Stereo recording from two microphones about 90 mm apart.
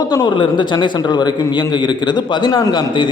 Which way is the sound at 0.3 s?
60° left (ahead or behind).